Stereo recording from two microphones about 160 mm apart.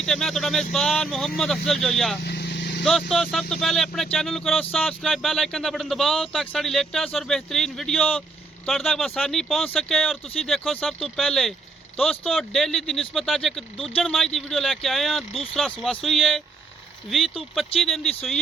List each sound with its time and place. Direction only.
0.0 s speech: centre (ahead or behind)
2.2 s vehicle: 90° left
3.1 s speech: centre (ahead or behind)